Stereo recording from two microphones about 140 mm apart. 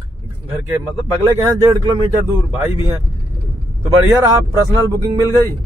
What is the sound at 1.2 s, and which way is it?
Speech, 25° right (ahead or behind).